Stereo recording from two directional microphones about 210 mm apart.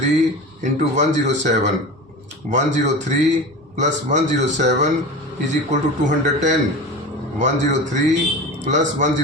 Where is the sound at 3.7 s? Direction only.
35° right (ahead or behind).